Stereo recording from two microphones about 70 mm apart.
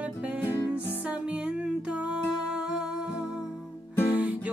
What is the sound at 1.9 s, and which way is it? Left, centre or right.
Music, centre.